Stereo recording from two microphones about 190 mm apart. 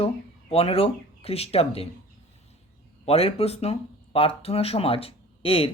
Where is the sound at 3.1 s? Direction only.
30° left (ahead or behind).